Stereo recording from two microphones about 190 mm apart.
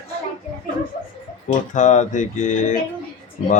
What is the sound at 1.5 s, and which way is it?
Speech, 40° left (ahead or behind).